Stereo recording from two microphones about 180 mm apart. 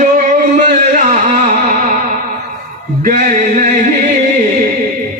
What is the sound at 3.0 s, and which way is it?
Speech, 45° right (ahead or behind).